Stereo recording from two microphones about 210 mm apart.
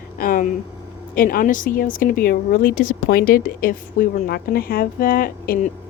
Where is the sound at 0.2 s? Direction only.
40° left (ahead or behind).